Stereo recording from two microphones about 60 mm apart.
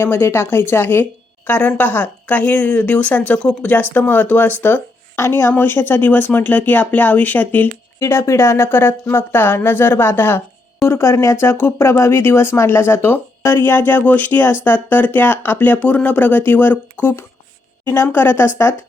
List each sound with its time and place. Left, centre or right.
0.0 s speech: left
1.5 s speech: left
5.1 s speech: left
7.9 s speech: left